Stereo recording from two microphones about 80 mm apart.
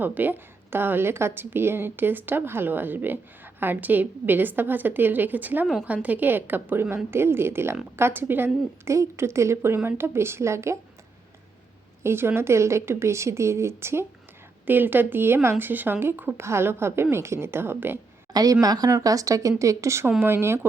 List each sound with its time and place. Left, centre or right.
0.0 s a woman's voice: right
12.0 s a woman's voice: right
18.3 s a woman's voice: right